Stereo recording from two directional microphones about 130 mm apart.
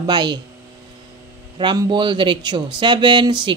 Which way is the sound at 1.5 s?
35° right (ahead or behind).